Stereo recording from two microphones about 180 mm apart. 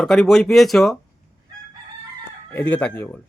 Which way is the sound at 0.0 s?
Centre (ahead or behind).